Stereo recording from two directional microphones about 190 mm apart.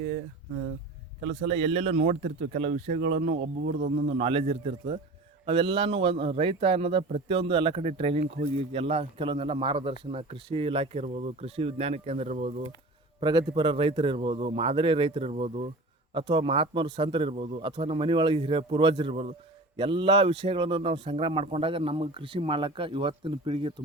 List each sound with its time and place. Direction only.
1.5 s a man's voice: 30° right (ahead or behind)
13.1 s a man's voice: 25° right (ahead or behind)